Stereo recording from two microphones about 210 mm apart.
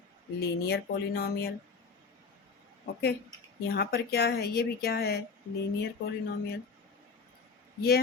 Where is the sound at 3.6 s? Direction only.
50° left (ahead or behind).